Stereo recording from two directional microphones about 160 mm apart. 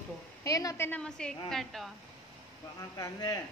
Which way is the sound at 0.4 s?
20° left (ahead or behind).